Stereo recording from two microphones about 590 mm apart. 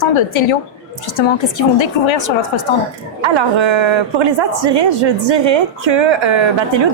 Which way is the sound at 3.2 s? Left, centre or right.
Right.